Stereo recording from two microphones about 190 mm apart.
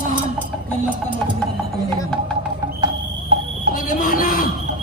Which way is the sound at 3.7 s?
45° left (ahead or behind).